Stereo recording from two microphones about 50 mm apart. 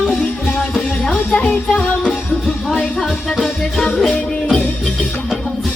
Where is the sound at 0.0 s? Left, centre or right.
Centre.